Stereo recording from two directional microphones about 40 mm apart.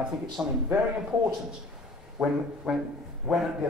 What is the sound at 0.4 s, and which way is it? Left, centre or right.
Speech, right.